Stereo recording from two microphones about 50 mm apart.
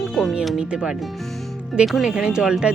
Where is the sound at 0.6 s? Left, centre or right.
Centre.